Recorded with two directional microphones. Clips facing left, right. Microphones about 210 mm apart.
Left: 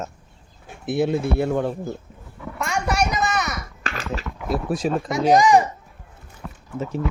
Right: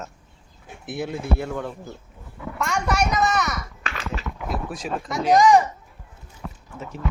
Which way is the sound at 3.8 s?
40° left (ahead or behind).